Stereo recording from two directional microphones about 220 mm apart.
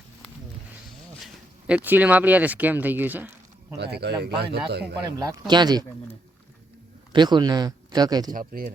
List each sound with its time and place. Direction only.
1.2 s speech: 5° right (ahead or behind)
3.8 s speech: 50° right (ahead or behind)
5.0 s speech: 20° right (ahead or behind)
7.1 s speech: 20° right (ahead or behind)
8.3 s speech: 40° right (ahead or behind)